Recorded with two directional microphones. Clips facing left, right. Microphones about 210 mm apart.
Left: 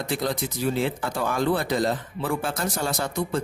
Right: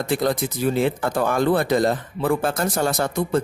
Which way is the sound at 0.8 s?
55° right (ahead or behind).